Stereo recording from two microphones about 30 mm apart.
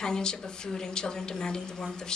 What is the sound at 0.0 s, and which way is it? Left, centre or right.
A woman's voice, left.